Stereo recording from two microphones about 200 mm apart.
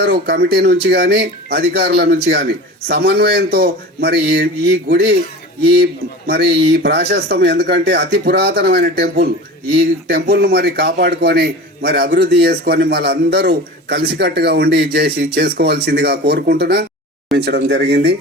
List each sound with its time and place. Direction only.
0.0 s a man's voice: 50° right (ahead or behind)